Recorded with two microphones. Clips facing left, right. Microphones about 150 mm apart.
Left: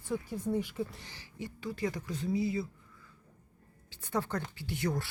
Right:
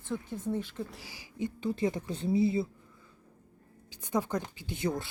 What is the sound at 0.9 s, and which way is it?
Speech, 5° right (ahead or behind).